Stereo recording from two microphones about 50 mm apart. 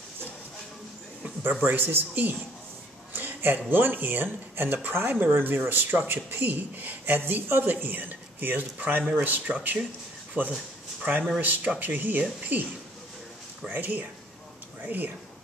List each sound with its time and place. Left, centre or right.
1.4 s speech: right
3.1 s a sound: right
3.7 s speech: right